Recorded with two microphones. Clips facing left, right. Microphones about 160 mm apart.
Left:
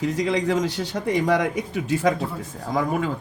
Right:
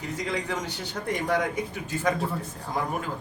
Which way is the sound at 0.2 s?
90° left.